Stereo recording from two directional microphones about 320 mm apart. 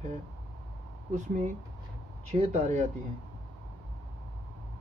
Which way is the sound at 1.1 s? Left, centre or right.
Right.